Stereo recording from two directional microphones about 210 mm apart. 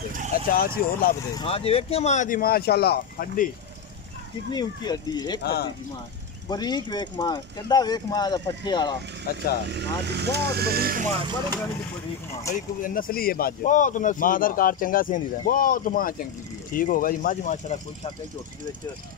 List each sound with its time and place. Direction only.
0.5 s speech: 45° left (ahead or behind)
1.3 s speech: 30° left (ahead or behind); by 3.4 s 45° left (ahead or behind)
4.5 s speech: 20° left (ahead or behind)
5.4 s speech: 50° left (ahead or behind)
6.5 s speech: 20° left (ahead or behind)
9.7 s speech: 55° right (ahead or behind)
12.5 s speech: 40° left (ahead or behind)